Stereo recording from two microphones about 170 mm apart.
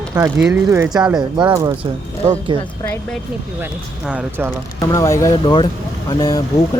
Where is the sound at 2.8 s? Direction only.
10° left (ahead or behind).